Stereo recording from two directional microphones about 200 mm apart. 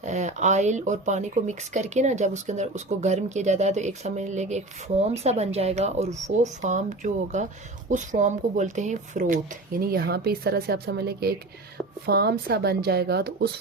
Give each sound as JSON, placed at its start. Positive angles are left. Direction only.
{"t": 0.0, "sound": "speech", "side_deg": -35}